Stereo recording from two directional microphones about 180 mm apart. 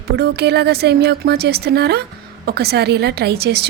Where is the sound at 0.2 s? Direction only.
65° right (ahead or behind).